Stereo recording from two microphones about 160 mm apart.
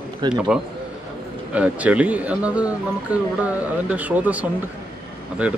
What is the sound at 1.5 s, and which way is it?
Speech, 5° right (ahead or behind).